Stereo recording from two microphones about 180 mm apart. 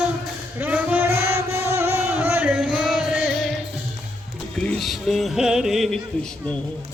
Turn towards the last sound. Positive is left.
turn(degrees=0)  # may be behind; listen again after turning